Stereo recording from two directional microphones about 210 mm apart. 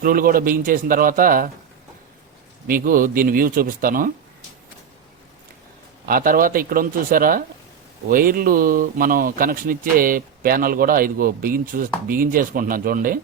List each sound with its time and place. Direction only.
0.0 s speech: 45° right (ahead or behind)
2.6 s speech: 40° right (ahead or behind)
6.1 s speech: 45° right (ahead or behind)